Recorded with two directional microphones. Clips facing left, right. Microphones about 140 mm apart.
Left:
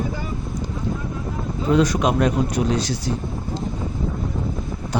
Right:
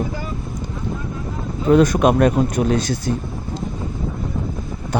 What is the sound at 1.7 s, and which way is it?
Speech, 55° right (ahead or behind).